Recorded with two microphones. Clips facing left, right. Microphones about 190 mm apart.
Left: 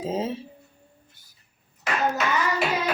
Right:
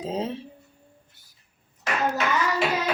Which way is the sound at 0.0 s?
5° left (ahead or behind).